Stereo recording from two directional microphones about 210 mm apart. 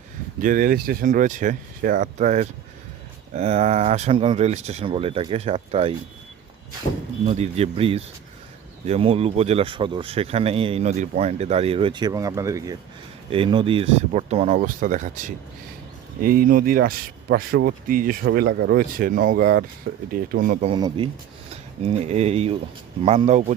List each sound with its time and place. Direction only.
0.4 s speech: 40° right (ahead or behind)
7.3 s speech: 30° right (ahead or behind)
20.7 s speech: 20° right (ahead or behind)